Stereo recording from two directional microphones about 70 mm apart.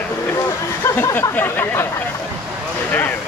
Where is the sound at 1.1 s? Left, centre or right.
Left.